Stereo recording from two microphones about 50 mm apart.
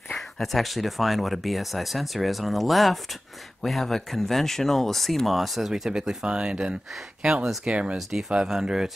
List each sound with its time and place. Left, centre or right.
0.1 s speech: centre
5.7 s speech: centre
8.5 s speech: centre